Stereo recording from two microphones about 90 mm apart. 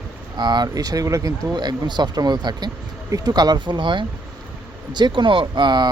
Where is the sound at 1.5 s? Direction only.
50° right (ahead or behind).